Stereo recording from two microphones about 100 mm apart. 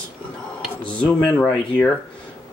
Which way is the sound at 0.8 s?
15° left (ahead or behind).